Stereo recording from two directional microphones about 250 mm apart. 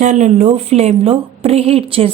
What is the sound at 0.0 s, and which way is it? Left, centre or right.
A woman's voice, right.